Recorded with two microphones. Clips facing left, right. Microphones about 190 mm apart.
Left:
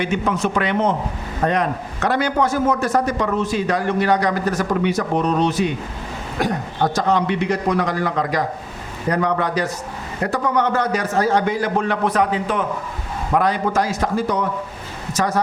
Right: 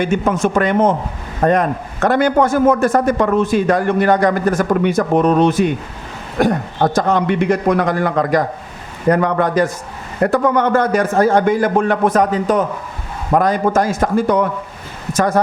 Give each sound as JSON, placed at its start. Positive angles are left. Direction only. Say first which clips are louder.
{"t": 0.0, "sound": "a man's voice", "louder": "right 4 dB", "side_deg": -50}